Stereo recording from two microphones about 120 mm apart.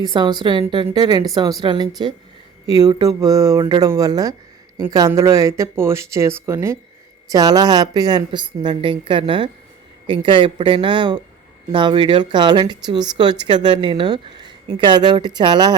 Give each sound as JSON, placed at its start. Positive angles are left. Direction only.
{"t": 0.0, "sound": "a woman's voice", "side_deg": -35}